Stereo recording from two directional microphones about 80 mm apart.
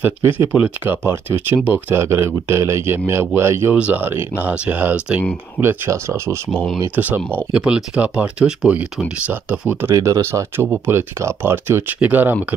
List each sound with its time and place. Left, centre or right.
0.0 s speech: right
2.0 s speech: right
3.7 s speech: centre
5.9 s speech: right
7.0 s speech: right
9.9 s speech: right